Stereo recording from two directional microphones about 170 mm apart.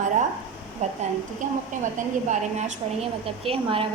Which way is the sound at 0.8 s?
40° right (ahead or behind).